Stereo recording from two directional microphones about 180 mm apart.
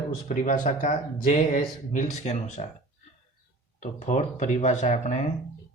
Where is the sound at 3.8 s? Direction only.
40° left (ahead or behind).